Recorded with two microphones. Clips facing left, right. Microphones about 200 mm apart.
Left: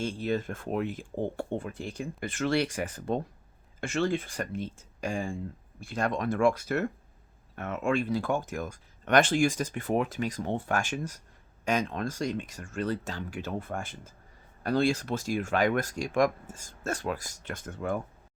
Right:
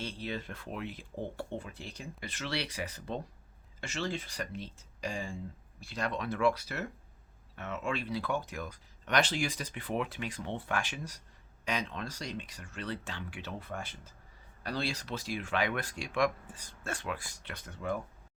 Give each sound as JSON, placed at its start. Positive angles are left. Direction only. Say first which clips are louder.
{"t": 0.0, "sound": "speech", "louder": "left 8 dB", "side_deg": 45}